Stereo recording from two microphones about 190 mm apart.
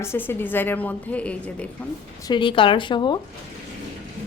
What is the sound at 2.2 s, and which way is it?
Speech, 25° left (ahead or behind).